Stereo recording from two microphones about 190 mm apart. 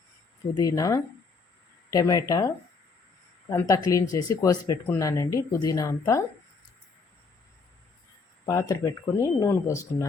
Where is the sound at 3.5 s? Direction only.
15° left (ahead or behind).